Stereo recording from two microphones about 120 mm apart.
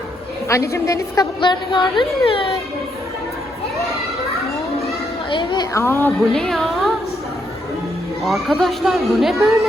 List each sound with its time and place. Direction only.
0.4 s a woman's voice: 25° left (ahead or behind)
1.4 s speech: 40° left (ahead or behind)
5.3 s a sound: 40° left (ahead or behind)
5.7 s a woman's voice: 20° left (ahead or behind)
6.3 s a woman's voice: 5° left (ahead or behind)
8.2 s speech: centre (ahead or behind)